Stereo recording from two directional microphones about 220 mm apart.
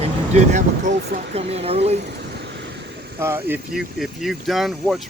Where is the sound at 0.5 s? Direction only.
35° right (ahead or behind).